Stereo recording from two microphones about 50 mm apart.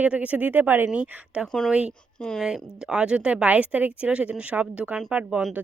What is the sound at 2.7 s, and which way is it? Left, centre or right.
A woman's voice, centre.